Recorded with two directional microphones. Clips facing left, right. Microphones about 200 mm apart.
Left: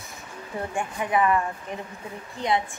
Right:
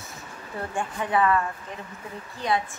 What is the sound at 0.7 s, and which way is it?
A woman's voice, 15° left (ahead or behind).